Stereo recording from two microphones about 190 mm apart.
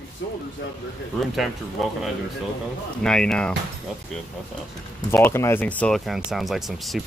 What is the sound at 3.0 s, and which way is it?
Speech, 5° left (ahead or behind).